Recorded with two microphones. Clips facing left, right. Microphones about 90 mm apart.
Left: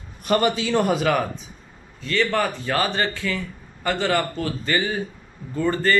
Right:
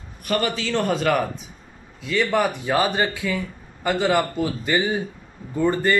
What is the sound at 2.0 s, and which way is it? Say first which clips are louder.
A man's voice: right 1 dB; 10° right (ahead or behind).